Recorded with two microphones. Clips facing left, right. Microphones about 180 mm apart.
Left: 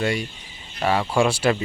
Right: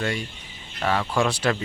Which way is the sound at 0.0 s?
10° left (ahead or behind).